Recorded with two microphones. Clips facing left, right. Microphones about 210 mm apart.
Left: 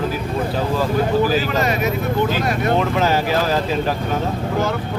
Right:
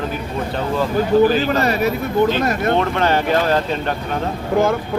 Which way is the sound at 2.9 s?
5° left (ahead or behind).